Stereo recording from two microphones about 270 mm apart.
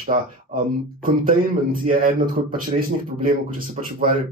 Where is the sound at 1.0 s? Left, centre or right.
Right.